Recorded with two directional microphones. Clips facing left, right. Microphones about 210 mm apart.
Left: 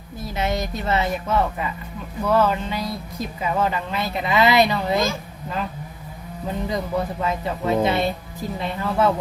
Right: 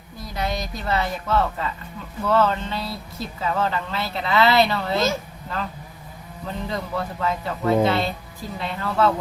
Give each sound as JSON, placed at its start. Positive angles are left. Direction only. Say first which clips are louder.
{"t": 0.3, "sound": "speech", "louder": "left 3 dB", "side_deg": 25}
{"t": 6.4, "sound": "speech", "louder": "left 3 dB", "side_deg": 15}